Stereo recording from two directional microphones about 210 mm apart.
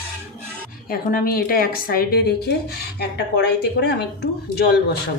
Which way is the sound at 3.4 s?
50° left (ahead or behind).